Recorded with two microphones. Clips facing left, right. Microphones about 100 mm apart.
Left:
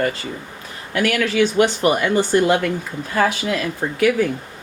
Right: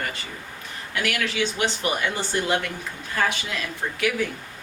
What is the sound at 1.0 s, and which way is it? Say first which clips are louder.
Speech: left 8 dB; 45° left (ahead or behind).